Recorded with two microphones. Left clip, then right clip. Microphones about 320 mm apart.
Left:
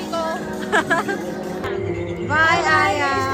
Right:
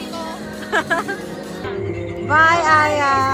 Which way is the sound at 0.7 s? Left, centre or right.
Centre.